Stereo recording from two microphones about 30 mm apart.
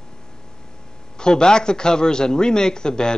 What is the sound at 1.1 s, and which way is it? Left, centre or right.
Speech, left.